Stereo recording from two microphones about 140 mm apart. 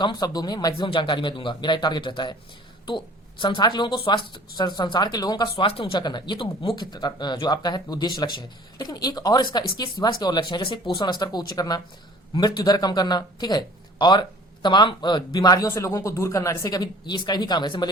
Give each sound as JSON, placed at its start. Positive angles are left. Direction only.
{"t": 0.0, "sound": "speech", "side_deg": 30}
{"t": 0.7, "sound": "speech", "side_deg": 40}